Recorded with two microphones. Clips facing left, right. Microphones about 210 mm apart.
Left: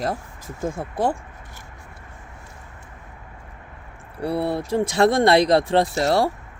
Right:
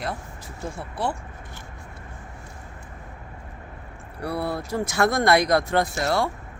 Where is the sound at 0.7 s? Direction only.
90° left.